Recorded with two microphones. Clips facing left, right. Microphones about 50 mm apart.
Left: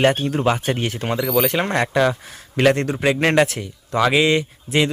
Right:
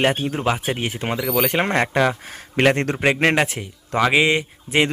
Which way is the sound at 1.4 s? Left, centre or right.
Right.